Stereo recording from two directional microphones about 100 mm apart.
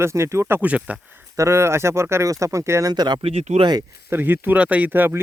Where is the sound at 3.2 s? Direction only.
80° right.